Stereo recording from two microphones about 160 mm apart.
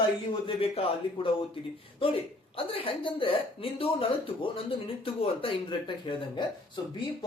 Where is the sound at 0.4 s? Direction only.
35° left (ahead or behind).